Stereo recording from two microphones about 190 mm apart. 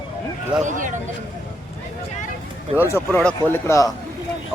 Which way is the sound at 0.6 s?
40° right (ahead or behind).